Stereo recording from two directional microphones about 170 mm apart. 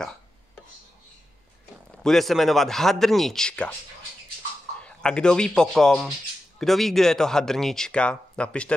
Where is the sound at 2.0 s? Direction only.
Centre (ahead or behind).